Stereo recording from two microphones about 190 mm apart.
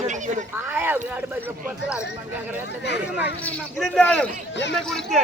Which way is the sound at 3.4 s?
10° left (ahead or behind).